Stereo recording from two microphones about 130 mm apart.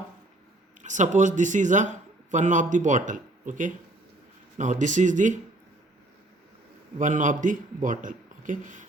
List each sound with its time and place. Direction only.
0.8 s speech: 70° right (ahead or behind)
7.0 s a man's voice: 75° right (ahead or behind)